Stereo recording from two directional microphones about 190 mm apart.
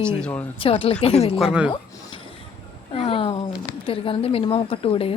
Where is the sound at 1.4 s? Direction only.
5° right (ahead or behind).